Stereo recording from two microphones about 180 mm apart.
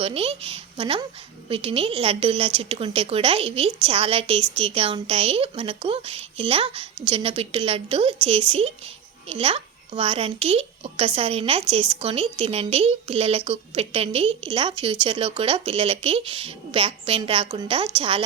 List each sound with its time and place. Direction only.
0.0 s a woman's voice: 30° right (ahead or behind)